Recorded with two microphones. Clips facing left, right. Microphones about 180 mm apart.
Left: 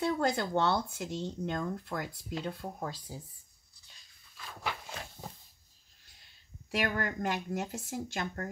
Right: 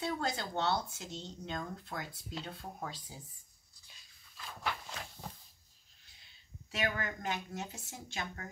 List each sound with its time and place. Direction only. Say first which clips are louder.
0.0 s speech: left 6 dB; 50° left (ahead or behind)
4.6 s walk: left 1 dB; 10° left (ahead or behind)
7.0 s speech: left 5 dB; 60° left (ahead or behind)